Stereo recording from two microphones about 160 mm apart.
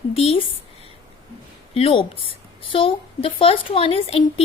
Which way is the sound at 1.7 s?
35° left (ahead or behind).